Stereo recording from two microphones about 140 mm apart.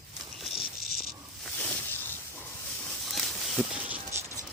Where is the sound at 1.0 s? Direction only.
5° left (ahead or behind).